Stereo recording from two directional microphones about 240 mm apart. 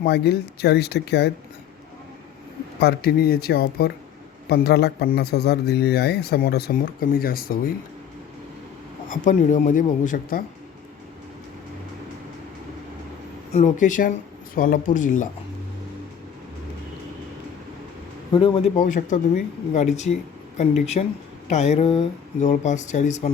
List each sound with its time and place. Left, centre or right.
0.0 s speech: left
2.8 s speech: left
9.0 s speech: left
13.5 s speech: left
18.3 s speech: left
18.8 s speech: left